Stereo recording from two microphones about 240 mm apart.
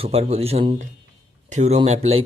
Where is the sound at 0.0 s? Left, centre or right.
Right.